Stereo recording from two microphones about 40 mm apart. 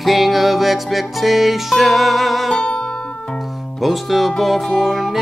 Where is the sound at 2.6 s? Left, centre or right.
Left.